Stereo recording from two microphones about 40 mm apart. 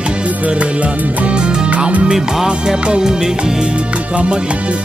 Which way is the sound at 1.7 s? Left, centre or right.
Right.